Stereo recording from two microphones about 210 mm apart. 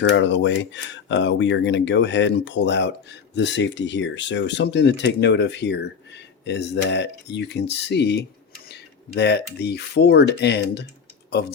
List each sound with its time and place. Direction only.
0.0 s speech: 60° left (ahead or behind)